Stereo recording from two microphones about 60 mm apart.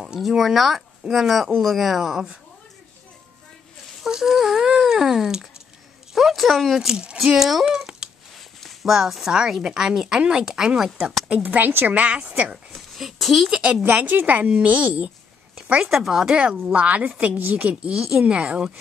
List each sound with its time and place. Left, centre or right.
0.0 s speech: centre
4.0 s a sound: centre
6.1 s speech: centre
8.4 s speech: centre
11.2 s speech: right
12.7 s a child's voice: centre
13.5 s speech: centre
13.8 s speech: right
15.9 s speech: centre
16.4 s speech: right